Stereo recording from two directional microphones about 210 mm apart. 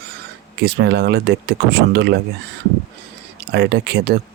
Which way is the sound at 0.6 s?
50° right (ahead or behind).